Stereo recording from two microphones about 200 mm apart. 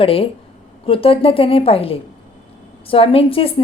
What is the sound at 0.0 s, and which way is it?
A woman's voice, 30° left (ahead or behind).